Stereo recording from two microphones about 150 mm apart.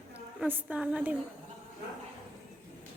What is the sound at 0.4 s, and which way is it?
Speech, 10° right (ahead or behind).